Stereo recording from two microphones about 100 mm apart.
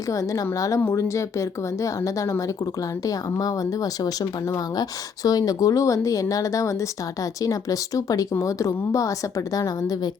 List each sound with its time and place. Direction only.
0.1 s speech: 35° left (ahead or behind)
4.8 s speech: 40° left (ahead or behind)